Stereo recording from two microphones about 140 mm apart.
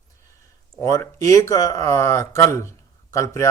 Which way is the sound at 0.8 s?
20° left (ahead or behind).